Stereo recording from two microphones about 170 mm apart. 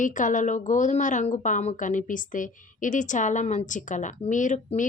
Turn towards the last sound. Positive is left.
turn(degrees=50)  # may be behind; listen again after turning